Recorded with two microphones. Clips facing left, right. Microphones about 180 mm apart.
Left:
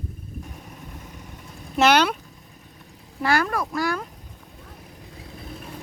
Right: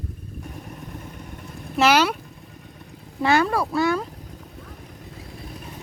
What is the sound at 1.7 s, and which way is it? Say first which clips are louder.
Speech: even; 5° right (ahead or behind).